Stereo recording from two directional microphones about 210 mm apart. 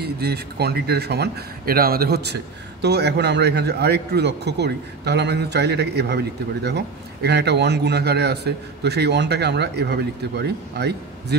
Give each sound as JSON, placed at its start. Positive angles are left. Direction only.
{"t": 0.0, "sound": "a man's voice", "side_deg": -50}